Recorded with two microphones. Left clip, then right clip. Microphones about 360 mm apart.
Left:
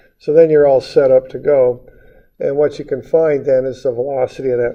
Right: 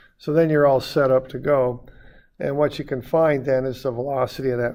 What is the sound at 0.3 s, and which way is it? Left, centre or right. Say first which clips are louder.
Speech: left 8 dB; right.